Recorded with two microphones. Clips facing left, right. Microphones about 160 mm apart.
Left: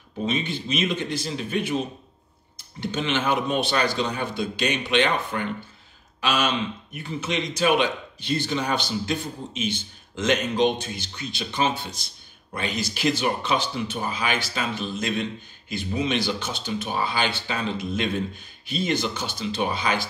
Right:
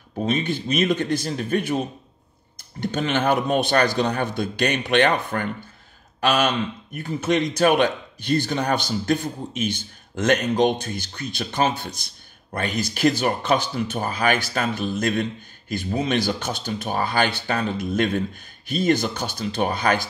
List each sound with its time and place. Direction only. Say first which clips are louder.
0.2 s speech: right 3 dB; 45° right (ahead or behind)
2.8 s speech: right 3 dB; 50° right (ahead or behind)